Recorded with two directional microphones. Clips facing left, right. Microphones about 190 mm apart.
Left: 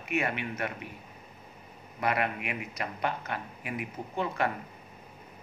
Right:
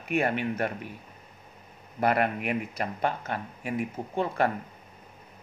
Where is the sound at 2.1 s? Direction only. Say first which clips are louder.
Right 5 dB; 45° right (ahead or behind).